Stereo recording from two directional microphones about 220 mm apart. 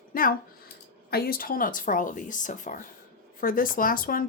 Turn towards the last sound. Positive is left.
turn(degrees=40)  # may be behind; listen again after turning